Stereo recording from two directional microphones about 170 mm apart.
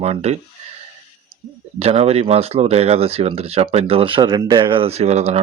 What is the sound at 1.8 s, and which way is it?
Speech, 35° right (ahead or behind).